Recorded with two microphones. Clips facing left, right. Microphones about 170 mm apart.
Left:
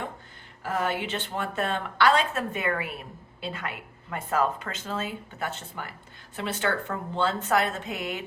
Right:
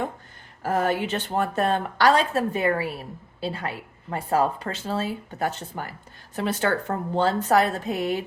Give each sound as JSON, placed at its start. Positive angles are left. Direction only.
{"t": 0.6, "sound": "speech", "side_deg": -40}